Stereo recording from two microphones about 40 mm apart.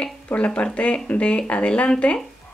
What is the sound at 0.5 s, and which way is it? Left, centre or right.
Speech, left.